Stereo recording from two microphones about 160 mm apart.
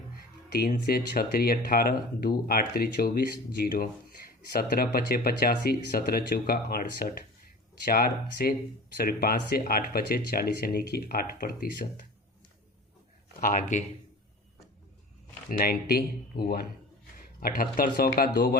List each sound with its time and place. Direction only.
0.2 s music: 80° left
0.9 s speech: 70° left (ahead or behind)
13.4 s speech: 55° left (ahead or behind)
15.4 s speech: 65° left (ahead or behind)
17.4 s speech: 60° left (ahead or behind)